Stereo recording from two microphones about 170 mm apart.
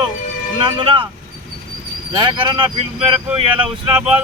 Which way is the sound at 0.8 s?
30° right (ahead or behind).